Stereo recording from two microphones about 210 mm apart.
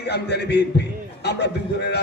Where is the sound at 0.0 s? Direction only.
50° left (ahead or behind).